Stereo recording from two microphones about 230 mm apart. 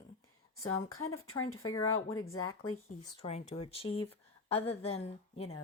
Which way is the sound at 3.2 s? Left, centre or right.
Left.